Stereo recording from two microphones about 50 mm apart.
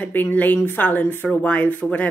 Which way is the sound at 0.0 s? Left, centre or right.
Left.